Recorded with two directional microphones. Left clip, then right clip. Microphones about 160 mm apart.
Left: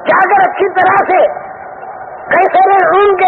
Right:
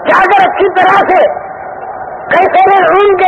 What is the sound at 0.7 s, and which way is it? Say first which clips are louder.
Speech: right 1 dB; 40° left (ahead or behind).